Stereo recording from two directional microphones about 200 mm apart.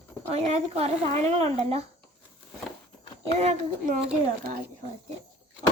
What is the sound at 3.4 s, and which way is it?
Speech, 35° right (ahead or behind).